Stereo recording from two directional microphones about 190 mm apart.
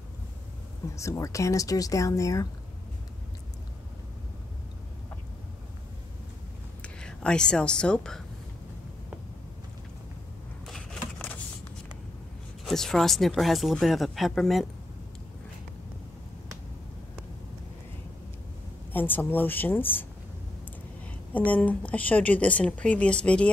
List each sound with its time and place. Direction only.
0.9 s speech: 15° left (ahead or behind)
6.8 s speech: 5° left (ahead or behind)
10.7 s a sound: 5° left (ahead or behind)
12.6 s speech: centre (ahead or behind)
18.9 s speech: 10° left (ahead or behind)
21.5 s speech: 10° left (ahead or behind)